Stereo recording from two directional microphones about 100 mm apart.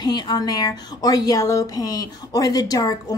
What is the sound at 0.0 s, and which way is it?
A woman's voice, 45° left (ahead or behind).